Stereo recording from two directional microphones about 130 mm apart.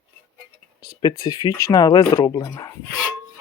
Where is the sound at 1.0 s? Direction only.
30° left (ahead or behind).